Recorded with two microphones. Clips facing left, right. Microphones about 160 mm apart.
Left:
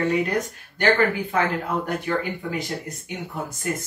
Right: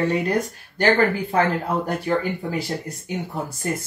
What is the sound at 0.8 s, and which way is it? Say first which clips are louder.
Speech: right 2 dB; 35° right (ahead or behind).